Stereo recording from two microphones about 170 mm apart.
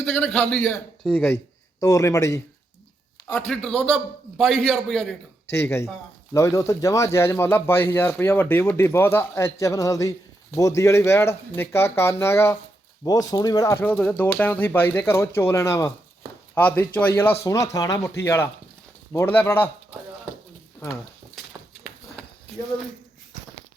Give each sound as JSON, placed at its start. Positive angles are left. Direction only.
{"t": 0.0, "sound": "speech", "side_deg": 10}
{"t": 3.3, "sound": "a man's voice", "side_deg": 5}
{"t": 5.5, "sound": "speech", "side_deg": 15}
{"t": 13.8, "sound": "speech", "side_deg": 5}